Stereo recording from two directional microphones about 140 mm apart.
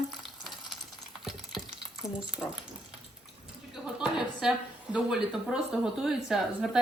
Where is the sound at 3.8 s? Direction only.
5° right (ahead or behind).